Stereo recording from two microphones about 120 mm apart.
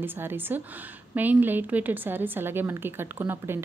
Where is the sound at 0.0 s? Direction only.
20° right (ahead or behind).